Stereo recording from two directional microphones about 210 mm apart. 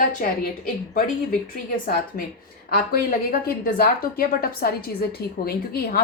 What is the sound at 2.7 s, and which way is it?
A woman's voice, 45° left (ahead or behind).